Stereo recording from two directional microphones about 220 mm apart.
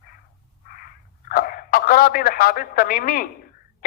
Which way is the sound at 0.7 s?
40° left (ahead or behind).